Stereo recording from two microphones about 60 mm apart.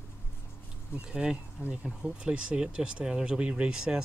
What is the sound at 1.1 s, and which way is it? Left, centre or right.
Speech, centre.